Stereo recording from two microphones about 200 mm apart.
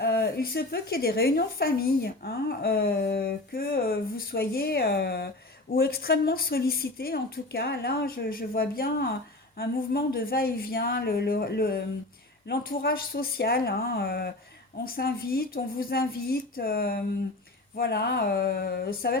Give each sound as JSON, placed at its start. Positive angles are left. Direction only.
{"t": 0.0, "sound": "a woman's voice", "side_deg": 55}